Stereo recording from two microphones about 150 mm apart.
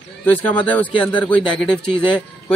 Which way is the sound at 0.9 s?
35° left (ahead or behind).